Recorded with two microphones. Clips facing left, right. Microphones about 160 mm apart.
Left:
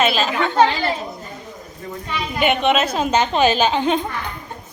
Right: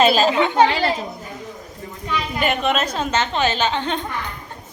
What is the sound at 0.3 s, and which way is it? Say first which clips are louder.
Speech: right 2 dB; 20° right (ahead or behind).